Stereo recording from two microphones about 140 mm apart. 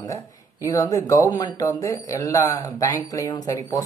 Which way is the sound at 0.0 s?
25° left (ahead or behind).